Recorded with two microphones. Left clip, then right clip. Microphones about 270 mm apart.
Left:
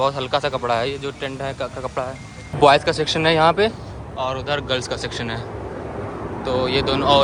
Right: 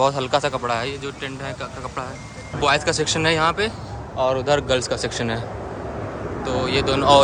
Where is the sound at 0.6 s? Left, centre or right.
Centre.